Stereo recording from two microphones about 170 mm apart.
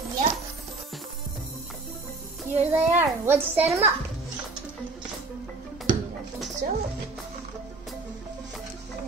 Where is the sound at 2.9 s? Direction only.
15° right (ahead or behind).